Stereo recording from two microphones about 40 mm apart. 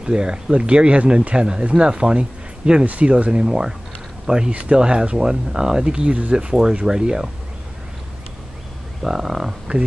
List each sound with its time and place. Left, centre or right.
0.0 s speech: right
2.9 s speech: right; by 3.7 s centre
4.5 s speech: right
4.7 s speech: right
9.0 s speech: centre